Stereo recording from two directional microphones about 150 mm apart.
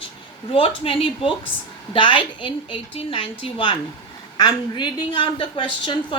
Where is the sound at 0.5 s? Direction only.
35° left (ahead or behind).